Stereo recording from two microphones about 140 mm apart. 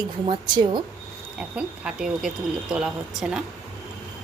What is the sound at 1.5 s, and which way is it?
Speech, 5° right (ahead or behind).